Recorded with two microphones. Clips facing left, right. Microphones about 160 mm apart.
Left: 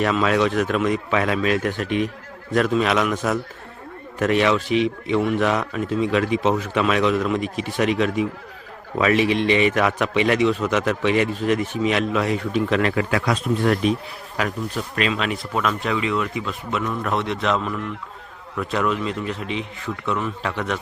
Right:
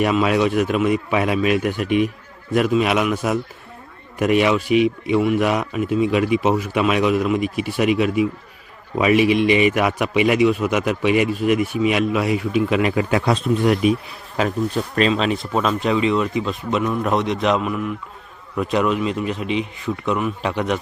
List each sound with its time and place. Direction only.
0.0 s a man's voice: 10° right (ahead or behind)
14.3 s a man's voice: 30° right (ahead or behind)